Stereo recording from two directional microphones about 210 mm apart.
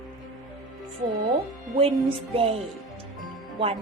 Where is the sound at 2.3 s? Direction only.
25° right (ahead or behind).